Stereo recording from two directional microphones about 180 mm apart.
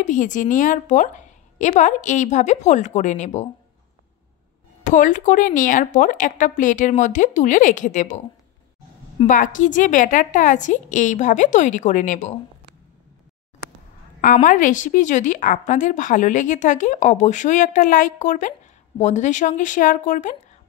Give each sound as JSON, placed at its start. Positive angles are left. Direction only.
{"t": 0.0, "sound": "a woman's voice", "side_deg": 45}
{"t": 4.8, "sound": "a woman's voice", "side_deg": 45}
{"t": 9.3, "sound": "a woman's voice", "side_deg": 45}
{"t": 14.2, "sound": "a woman's voice", "side_deg": 45}